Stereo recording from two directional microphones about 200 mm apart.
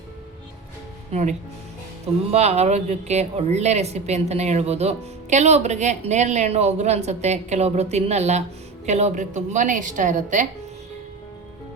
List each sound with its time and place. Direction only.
1.1 s speech: 35° right (ahead or behind)